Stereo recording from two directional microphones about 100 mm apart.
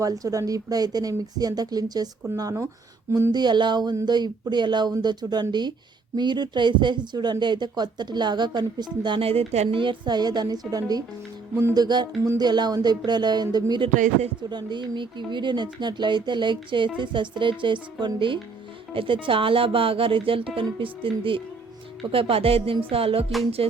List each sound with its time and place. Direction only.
0.0 s speech: 35° right (ahead or behind)
3.3 s speech: 50° right (ahead or behind)
9.2 s speech: 75° right (ahead or behind)
9.8 s speech: 50° right (ahead or behind); by 23.2 s 70° right (ahead or behind)
23.6 s music: 70° right (ahead or behind)